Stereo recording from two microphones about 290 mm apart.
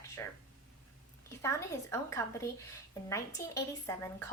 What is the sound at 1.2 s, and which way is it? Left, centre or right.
A woman's voice, centre.